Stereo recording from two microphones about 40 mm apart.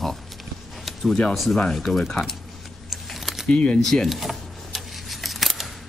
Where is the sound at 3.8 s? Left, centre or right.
Centre.